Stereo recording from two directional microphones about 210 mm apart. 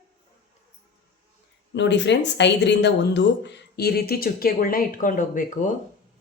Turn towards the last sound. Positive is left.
turn(degrees=40)  # may be behind; listen again after turning